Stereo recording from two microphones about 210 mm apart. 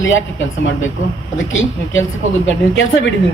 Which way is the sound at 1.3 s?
65° left (ahead or behind).